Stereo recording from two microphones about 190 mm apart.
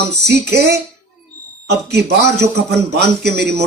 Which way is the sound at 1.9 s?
60° right (ahead or behind).